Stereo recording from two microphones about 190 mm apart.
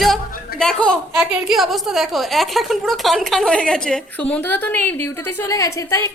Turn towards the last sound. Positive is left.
turn(degrees=15)  # may be behind; listen again after turning